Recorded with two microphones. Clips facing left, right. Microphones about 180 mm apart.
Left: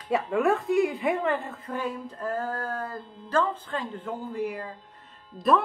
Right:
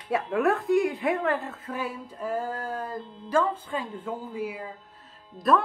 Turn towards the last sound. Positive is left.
turn(degrees=0)  # may be behind; listen again after turning